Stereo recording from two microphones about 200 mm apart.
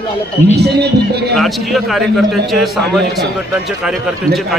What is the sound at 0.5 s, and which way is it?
Speech, 55° right (ahead or behind).